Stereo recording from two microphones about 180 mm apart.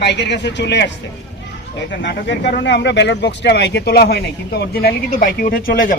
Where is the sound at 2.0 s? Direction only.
80° left.